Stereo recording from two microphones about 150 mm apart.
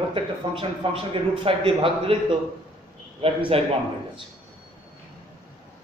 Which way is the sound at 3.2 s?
40° right (ahead or behind).